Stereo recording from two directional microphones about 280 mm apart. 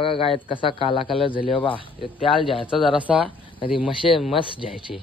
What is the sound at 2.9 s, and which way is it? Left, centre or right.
Speech, centre.